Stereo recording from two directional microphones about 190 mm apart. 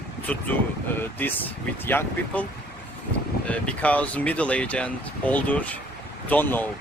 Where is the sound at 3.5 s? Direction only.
5° left (ahead or behind).